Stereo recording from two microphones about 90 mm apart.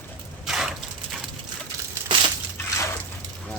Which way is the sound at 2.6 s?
35° left (ahead or behind).